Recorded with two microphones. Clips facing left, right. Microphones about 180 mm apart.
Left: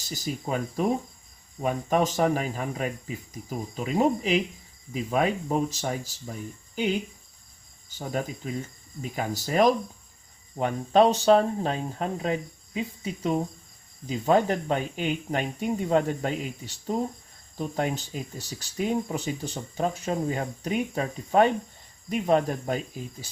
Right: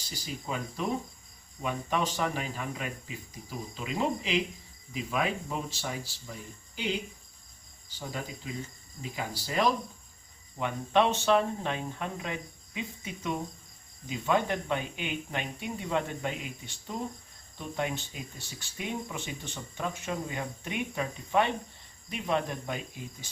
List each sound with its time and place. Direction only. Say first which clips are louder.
0.1 s speech: left 6 dB; 45° left (ahead or behind)
7.9 s speech: left 7 dB; 50° left (ahead or behind)